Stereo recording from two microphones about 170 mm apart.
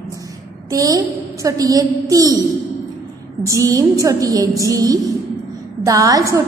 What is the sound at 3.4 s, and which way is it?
A woman's voice, 20° right (ahead or behind).